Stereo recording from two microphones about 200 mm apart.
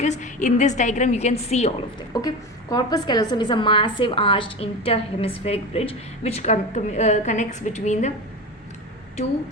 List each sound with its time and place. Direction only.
0.0 s a woman's voice: 35° left (ahead or behind)
2.1 s a woman's voice: 20° left (ahead or behind); by 8.1 s 35° left (ahead or behind)